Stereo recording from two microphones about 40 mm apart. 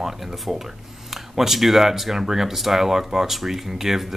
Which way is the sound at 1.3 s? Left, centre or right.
Centre.